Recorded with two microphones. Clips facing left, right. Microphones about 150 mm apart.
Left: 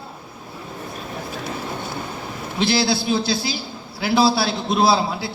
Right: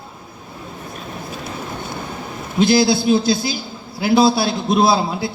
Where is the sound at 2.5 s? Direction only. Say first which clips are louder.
Right 6 dB; 45° right (ahead or behind).